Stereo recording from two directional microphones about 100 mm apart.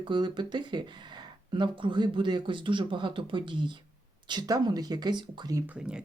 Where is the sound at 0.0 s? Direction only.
55° right (ahead or behind).